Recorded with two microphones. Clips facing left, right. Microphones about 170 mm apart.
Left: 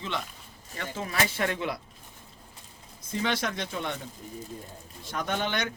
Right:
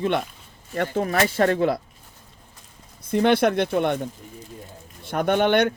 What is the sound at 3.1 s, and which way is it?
Speech, 60° right (ahead or behind).